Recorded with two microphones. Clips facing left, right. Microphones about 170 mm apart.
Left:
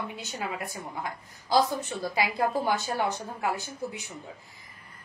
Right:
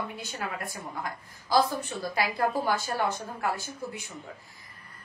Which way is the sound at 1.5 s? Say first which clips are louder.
Even; 20° left (ahead or behind).